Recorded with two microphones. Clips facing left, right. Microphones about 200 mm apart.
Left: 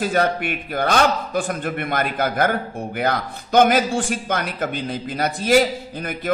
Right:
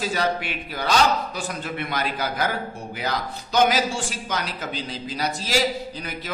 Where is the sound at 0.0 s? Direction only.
55° left (ahead or behind).